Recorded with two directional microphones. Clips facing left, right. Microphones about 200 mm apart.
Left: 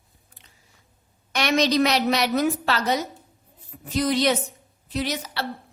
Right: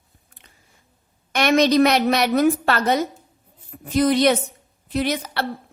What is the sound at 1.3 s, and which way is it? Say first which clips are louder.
A woman's voice: right 5 dB; 55° right (ahead or behind).